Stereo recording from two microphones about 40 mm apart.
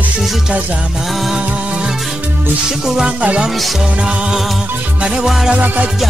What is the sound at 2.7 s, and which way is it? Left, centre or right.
Music, centre.